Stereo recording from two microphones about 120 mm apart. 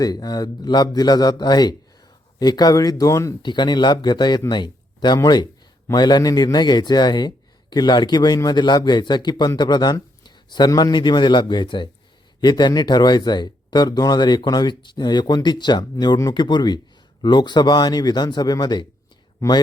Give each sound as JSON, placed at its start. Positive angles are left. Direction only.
{"t": 0.0, "sound": "speech", "side_deg": 35}
{"t": 3.4, "sound": "speech", "side_deg": 40}